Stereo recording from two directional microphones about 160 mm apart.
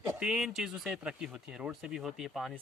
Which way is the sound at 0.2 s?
5° right (ahead or behind).